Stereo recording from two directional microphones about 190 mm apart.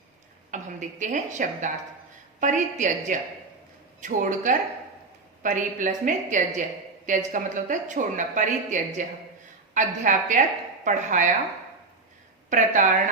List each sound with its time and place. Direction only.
0.5 s a woman's voice: 40° right (ahead or behind)
12.5 s a woman's voice: 40° right (ahead or behind)